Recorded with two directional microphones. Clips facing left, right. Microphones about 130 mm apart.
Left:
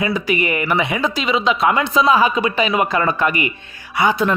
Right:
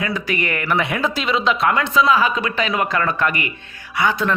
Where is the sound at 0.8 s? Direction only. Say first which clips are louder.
Left 1 dB; centre (ahead or behind).